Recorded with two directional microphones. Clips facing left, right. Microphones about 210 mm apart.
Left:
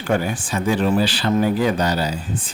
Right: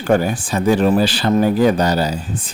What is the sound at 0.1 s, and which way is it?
Speech, 40° right (ahead or behind).